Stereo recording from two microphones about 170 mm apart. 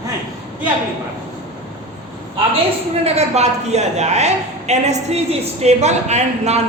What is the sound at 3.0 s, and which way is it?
A woman's voice, 40° right (ahead or behind).